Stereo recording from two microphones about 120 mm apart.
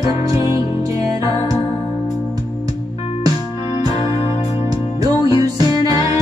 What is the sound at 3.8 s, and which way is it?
Music, 30° right (ahead or behind).